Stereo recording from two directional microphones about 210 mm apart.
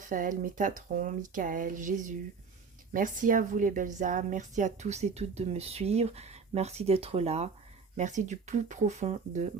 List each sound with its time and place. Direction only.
0.0 s a woman's voice: 40° right (ahead or behind)